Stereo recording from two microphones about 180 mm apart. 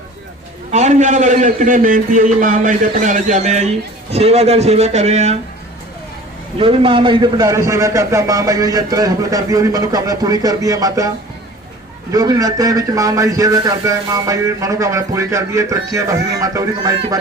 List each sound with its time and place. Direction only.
0.7 s a man's voice: 40° right (ahead or behind)
6.6 s a man's voice: 30° right (ahead or behind)
12.1 s a man's voice: 20° right (ahead or behind)